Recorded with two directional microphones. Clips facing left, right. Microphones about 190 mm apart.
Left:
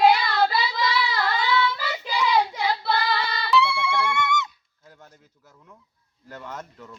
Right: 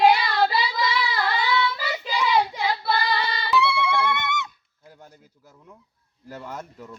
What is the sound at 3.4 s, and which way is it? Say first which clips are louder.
Music: left 3 dB; 15° right (ahead or behind).